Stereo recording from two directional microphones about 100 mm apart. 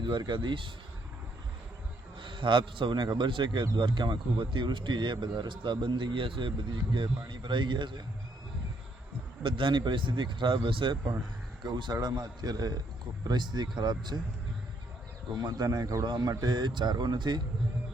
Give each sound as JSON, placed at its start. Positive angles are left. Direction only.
{"t": 0.0, "sound": "speech", "side_deg": -50}
{"t": 2.2, "sound": "speech", "side_deg": -55}
{"t": 9.4, "sound": "speech", "side_deg": -55}
{"t": 11.6, "sound": "speech", "side_deg": -45}
{"t": 15.4, "sound": "speech", "side_deg": -40}
{"t": 16.0, "sound": "speech", "side_deg": -50}